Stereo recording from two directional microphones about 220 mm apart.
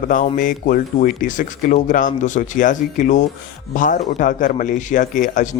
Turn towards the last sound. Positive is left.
turn(degrees=35)  # may be behind; listen again after turning